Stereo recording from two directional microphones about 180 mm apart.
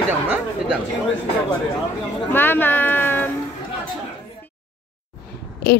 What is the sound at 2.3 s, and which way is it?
Speech, 10° left (ahead or behind).